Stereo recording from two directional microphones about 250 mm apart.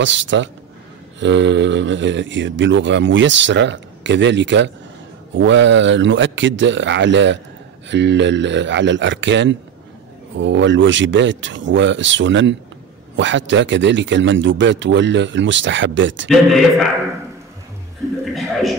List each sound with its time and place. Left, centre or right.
0.0 s speech: right
18.3 s chuckle: centre